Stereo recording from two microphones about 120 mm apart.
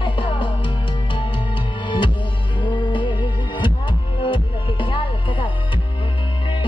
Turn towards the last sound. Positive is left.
turn(degrees=45)  # may be behind; listen again after turning